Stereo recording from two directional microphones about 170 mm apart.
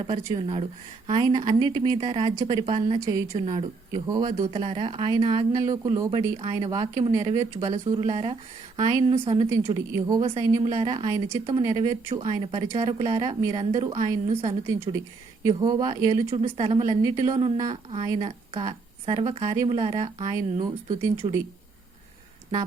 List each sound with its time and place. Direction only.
0.0 s speech: 35° right (ahead or behind)
8.8 s speech: 25° right (ahead or behind)
9.1 s speech: 35° right (ahead or behind)
9.5 s speech: 20° right (ahead or behind)
13.1 s speech: 35° right (ahead or behind)
13.7 s speech: 25° right (ahead or behind)
17.0 s speech: 25° right (ahead or behind)